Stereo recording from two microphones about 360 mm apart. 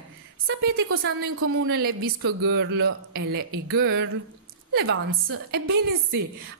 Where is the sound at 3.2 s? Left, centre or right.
Right.